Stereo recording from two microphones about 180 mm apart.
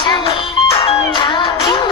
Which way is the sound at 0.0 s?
30° left (ahead or behind).